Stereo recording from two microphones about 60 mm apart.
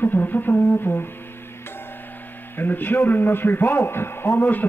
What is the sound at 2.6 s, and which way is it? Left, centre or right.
A man's voice, left.